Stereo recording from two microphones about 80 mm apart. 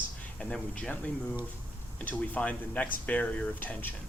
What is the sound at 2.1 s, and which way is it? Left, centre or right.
Speech, centre.